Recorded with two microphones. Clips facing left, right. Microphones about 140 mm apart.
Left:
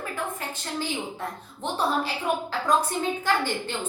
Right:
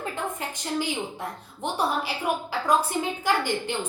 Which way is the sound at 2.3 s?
10° right (ahead or behind).